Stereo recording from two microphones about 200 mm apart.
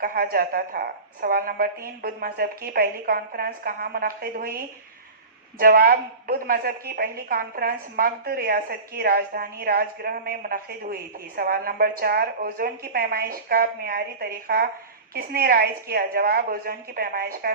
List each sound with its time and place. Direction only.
0.0 s a woman's voice: 50° right (ahead or behind)
5.5 s a woman's voice: 45° right (ahead or behind)